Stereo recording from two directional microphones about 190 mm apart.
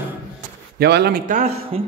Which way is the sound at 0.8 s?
60° right (ahead or behind).